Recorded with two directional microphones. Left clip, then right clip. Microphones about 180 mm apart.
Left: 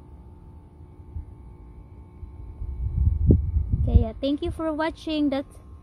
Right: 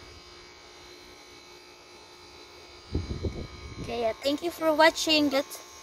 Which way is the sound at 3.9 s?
10° left (ahead or behind).